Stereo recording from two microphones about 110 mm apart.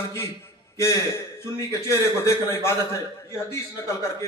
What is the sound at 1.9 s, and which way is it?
Speech, 25° left (ahead or behind).